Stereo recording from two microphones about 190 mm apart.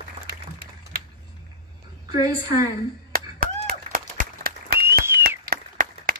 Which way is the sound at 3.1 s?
50° right (ahead or behind).